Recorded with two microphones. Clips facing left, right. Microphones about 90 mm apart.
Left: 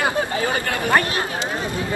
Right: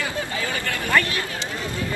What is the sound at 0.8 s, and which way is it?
Speech, 25° left (ahead or behind).